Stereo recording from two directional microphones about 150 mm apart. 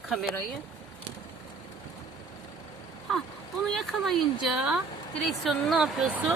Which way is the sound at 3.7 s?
Centre (ahead or behind).